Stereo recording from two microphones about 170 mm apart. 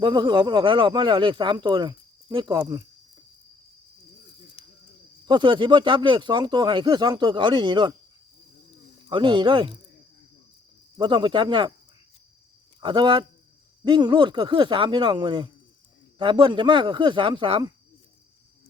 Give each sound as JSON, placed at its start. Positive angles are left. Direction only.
{"t": 0.0, "sound": "speech", "side_deg": -25}
{"t": 4.6, "sound": "cricket", "side_deg": 35}
{"t": 5.2, "sound": "speech", "side_deg": -25}
{"t": 9.0, "sound": "speech", "side_deg": -30}
{"t": 10.9, "sound": "speech", "side_deg": -25}
{"t": 12.8, "sound": "speech", "side_deg": -30}